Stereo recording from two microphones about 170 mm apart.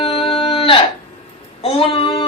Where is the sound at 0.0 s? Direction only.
30° left (ahead or behind).